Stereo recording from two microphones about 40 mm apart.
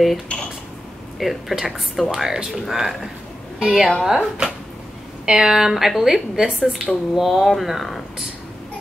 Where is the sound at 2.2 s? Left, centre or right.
Centre.